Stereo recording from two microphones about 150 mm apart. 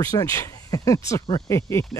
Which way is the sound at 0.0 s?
20° left (ahead or behind).